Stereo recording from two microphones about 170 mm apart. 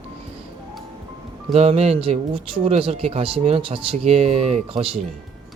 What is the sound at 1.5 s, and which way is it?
Speech, 35° right (ahead or behind).